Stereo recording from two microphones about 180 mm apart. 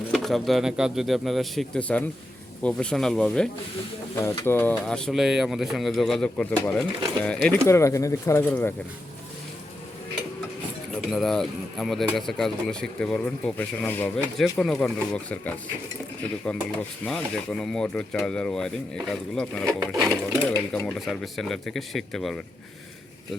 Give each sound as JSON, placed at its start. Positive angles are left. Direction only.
{"t": 0.1, "sound": "speech", "side_deg": 0}
{"t": 4.1, "sound": "speech", "side_deg": 15}
{"t": 7.7, "sound": "speech", "side_deg": 15}
{"t": 11.1, "sound": "speech", "side_deg": 0}
{"t": 17.1, "sound": "speech", "side_deg": 5}
{"t": 19.8, "sound": "sewing machine", "side_deg": -20}
{"t": 20.4, "sound": "speech", "side_deg": 10}